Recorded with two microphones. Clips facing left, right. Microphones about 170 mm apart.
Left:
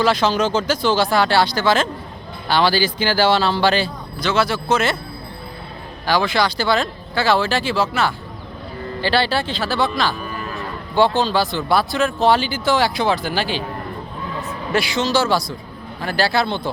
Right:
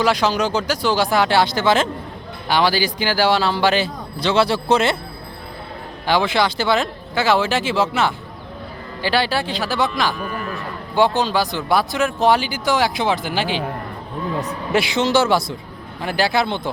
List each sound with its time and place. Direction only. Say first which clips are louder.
0.0 s speech: left 1 dB; 10° right (ahead or behind)
4.2 s speech: right 2 dB; 30° right (ahead or behind)
6.1 s speech: even; 20° right (ahead or behind)
10.9 s speech: left 1 dB; 15° right (ahead or behind)
14.7 s speech: right 1 dB; 20° right (ahead or behind)